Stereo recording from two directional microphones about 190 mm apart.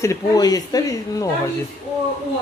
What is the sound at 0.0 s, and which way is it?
Speech, 15° left (ahead or behind).